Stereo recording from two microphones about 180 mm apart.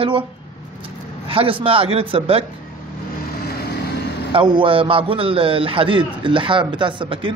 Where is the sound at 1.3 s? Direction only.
30° right (ahead or behind).